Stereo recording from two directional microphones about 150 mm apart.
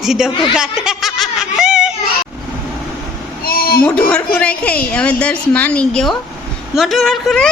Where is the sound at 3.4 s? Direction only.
80° left.